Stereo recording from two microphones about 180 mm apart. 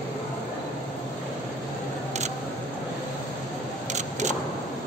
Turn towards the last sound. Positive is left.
turn(degrees=-40)  # may be behind; listen again after turning